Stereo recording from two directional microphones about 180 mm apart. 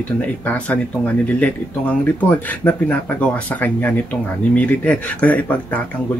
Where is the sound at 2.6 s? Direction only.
10° left (ahead or behind).